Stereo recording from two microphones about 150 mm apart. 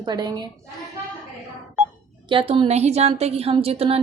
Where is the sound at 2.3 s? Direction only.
35° right (ahead or behind).